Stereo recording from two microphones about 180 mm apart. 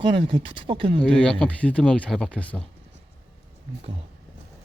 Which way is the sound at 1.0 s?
5° left (ahead or behind).